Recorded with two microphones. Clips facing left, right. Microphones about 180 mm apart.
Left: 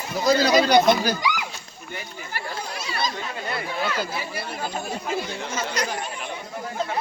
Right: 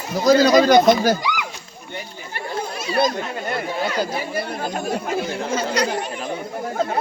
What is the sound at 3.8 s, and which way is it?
Speech, 40° right (ahead or behind).